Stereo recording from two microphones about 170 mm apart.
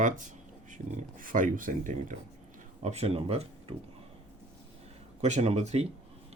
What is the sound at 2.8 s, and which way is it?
Speech, 40° right (ahead or behind).